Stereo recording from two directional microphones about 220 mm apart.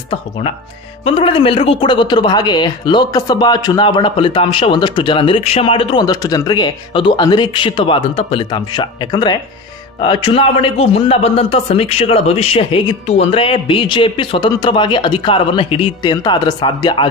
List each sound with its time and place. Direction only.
0.1 s speech: 25° left (ahead or behind)